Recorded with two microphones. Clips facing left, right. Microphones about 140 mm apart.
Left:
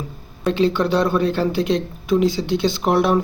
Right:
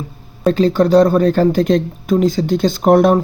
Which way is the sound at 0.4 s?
40° right (ahead or behind).